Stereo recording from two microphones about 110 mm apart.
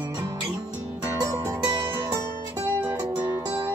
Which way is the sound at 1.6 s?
40° right (ahead or behind).